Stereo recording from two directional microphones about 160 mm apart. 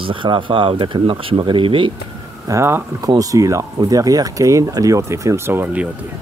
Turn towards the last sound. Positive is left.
turn(degrees=-15)  # may be behind; listen again after turning